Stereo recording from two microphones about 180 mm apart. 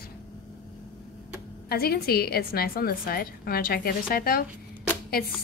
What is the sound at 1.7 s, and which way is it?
A woman's voice, 60° left (ahead or behind).